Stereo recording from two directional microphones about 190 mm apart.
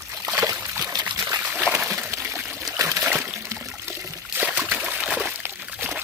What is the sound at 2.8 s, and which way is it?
Trickle, 15° right (ahead or behind).